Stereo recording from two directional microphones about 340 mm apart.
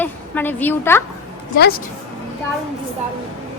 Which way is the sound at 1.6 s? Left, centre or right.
Left.